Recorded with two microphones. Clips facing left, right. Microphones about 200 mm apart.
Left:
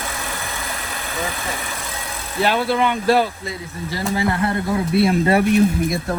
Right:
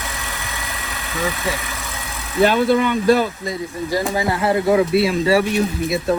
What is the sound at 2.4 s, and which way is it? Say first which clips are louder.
Speech: right 3 dB; 50° right (ahead or behind).